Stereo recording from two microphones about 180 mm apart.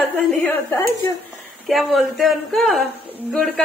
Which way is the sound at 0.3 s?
5° left (ahead or behind).